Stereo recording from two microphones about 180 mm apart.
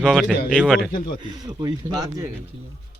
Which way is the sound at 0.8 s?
50° left (ahead or behind).